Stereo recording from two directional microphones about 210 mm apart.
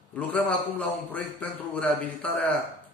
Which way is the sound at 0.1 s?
5° left (ahead or behind).